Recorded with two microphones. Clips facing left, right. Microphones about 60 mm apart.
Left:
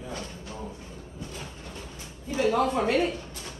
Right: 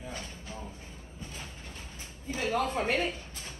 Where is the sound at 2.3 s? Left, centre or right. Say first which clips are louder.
Left 6 dB; left.